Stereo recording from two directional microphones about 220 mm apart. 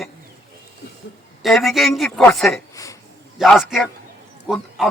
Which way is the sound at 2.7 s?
15° left (ahead or behind).